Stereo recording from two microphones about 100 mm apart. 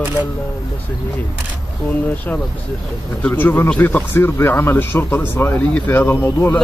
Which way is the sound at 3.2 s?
15° left (ahead or behind).